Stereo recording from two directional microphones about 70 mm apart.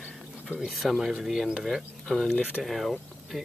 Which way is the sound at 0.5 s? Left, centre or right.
Centre.